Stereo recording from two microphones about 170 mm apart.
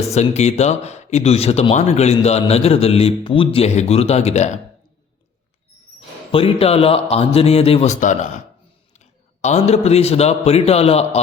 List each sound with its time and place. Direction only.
0.0 s speech: 40° left (ahead or behind)
6.3 s speech: 35° left (ahead or behind)
9.4 s speech: 40° left (ahead or behind)